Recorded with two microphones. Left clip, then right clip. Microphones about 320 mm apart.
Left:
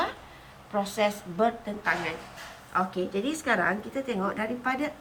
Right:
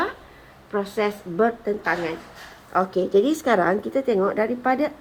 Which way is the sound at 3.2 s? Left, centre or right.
Right.